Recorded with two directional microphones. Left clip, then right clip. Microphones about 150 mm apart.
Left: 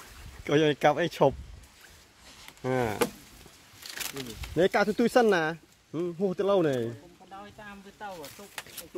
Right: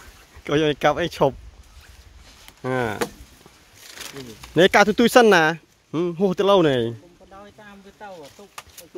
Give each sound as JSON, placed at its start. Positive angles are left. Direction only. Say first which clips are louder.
{"t": 0.4, "sound": "speech", "louder": "right 4 dB", "side_deg": -20}
{"t": 2.6, "sound": "speech", "louder": "right 5 dB", "side_deg": -30}
{"t": 4.6, "sound": "speech", "louder": "right 9 dB", "side_deg": -70}
{"t": 7.2, "sound": "speech", "louder": "right 1 dB", "side_deg": -5}